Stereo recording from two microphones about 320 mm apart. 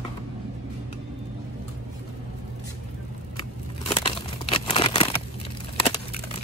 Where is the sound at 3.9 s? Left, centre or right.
Centre.